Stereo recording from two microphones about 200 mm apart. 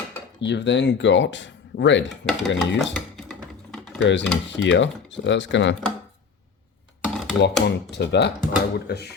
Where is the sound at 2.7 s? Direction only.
Centre (ahead or behind).